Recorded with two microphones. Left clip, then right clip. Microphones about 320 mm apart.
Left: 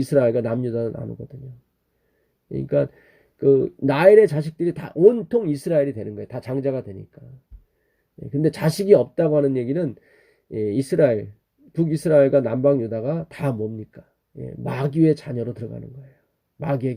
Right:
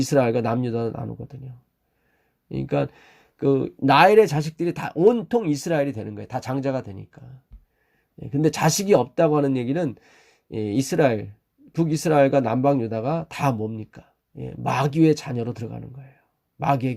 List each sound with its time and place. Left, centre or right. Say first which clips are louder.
0.0 s speech: left 2 dB; centre
2.5 s speech: left 3 dB; centre
8.2 s speech: right 1 dB; centre